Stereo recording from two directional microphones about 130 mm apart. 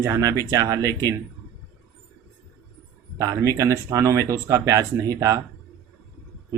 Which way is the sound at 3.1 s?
25° right (ahead or behind).